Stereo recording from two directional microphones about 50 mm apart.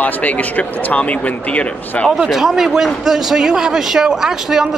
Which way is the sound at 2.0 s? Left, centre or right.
Centre.